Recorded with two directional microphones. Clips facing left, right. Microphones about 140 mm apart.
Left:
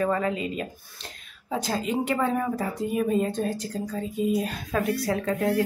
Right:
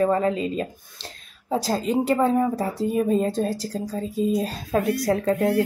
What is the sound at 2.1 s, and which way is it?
A woman's voice, 25° right (ahead or behind).